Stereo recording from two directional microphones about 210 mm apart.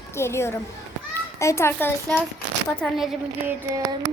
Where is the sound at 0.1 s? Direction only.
10° left (ahead or behind).